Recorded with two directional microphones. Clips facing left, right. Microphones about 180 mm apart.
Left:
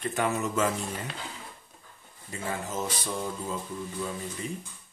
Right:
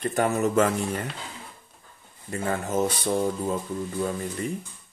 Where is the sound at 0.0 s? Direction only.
45° right (ahead or behind).